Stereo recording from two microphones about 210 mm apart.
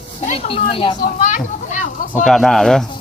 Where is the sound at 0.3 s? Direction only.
25° left (ahead or behind).